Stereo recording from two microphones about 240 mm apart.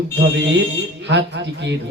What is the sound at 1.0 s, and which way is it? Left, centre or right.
Speech, right.